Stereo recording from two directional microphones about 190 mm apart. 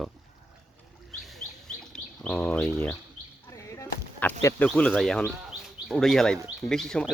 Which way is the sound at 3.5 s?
15° left (ahead or behind).